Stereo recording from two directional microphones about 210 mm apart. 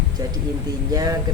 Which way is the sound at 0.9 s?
15° right (ahead or behind).